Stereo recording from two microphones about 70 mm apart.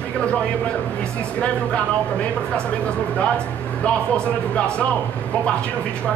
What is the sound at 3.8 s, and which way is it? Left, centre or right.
Speech, centre.